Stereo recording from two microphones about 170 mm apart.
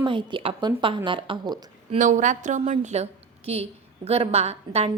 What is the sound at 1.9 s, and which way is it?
A woman's voice, 45° right (ahead or behind).